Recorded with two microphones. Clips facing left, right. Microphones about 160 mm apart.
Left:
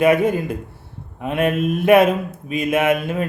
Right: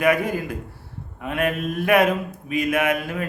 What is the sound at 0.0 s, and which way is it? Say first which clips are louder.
A man's voice: left 5 dB; 25° left (ahead or behind).